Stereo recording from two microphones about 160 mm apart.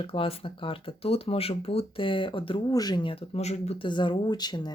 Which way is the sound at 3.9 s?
30° left (ahead or behind).